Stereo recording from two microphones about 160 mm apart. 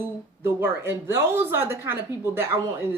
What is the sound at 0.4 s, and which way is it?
Speech, 15° right (ahead or behind).